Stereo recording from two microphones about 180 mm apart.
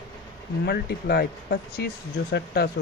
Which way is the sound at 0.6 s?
60° left (ahead or behind).